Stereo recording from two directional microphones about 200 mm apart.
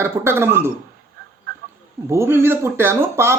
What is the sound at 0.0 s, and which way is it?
Speech, 10° right (ahead or behind).